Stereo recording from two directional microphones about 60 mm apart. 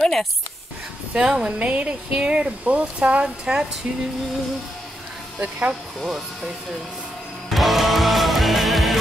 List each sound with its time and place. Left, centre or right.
0.0 s speech: centre
1.1 s speech: centre
5.4 s speech: right
6.0 s speech: centre
7.4 s music: centre